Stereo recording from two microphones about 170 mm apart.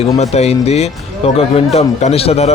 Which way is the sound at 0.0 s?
40° left (ahead or behind).